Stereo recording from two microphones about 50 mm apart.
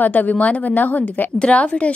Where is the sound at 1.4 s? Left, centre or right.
Left.